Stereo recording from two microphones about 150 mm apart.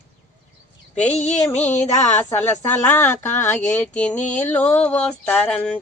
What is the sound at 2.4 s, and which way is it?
Speech, 15° left (ahead or behind).